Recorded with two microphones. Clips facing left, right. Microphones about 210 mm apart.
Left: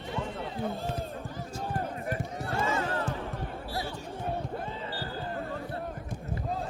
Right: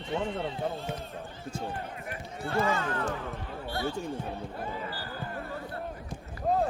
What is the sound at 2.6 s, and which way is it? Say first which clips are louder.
Music: right 1 dB; 25° left (ahead or behind).